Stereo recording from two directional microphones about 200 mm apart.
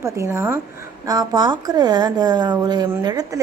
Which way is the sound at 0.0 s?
15° right (ahead or behind).